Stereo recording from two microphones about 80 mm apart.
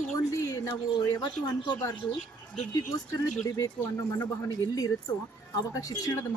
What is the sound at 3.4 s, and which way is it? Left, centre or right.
A woman's voice, left.